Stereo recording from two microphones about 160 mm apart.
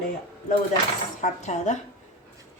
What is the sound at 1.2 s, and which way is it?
Speech, 45° left (ahead or behind).